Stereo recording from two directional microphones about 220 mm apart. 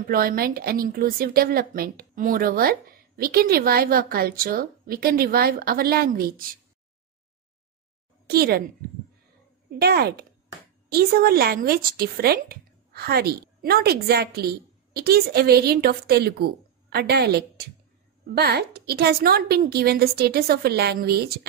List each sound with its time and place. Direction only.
0.0 s a woman's voice: 40° right (ahead or behind)
8.3 s a woman's voice: 45° right (ahead or behind)
9.7 s a woman's voice: 45° right (ahead or behind)